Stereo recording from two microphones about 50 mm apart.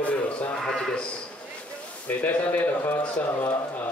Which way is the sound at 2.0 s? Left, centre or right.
Left.